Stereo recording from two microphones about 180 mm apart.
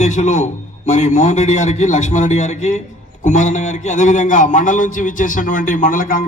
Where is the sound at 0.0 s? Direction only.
40° left (ahead or behind).